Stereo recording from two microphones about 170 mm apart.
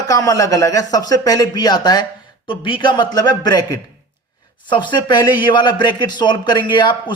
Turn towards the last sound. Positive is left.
turn(degrees=25)  # may be behind; listen again after turning